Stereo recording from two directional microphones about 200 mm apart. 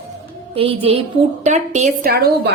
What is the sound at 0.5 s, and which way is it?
A woman's voice, 30° right (ahead or behind).